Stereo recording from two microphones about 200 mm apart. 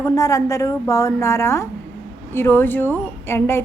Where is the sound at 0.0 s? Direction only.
15° left (ahead or behind).